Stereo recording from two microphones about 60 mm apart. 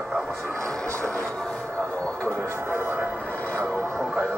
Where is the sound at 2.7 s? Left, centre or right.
Right.